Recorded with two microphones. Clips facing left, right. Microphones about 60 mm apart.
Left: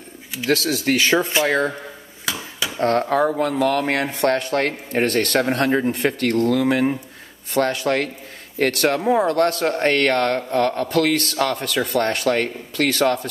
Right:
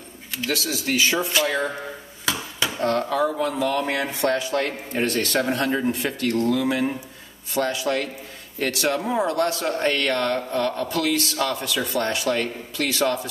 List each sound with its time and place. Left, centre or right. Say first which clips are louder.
0.5 s a man's voice: left 6 dB; left
2.8 s a man's voice: left 4 dB; left